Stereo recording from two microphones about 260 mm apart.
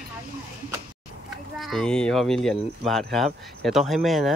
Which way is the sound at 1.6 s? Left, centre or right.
Centre.